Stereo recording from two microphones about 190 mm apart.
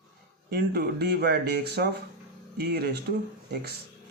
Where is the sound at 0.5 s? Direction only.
55° right (ahead or behind).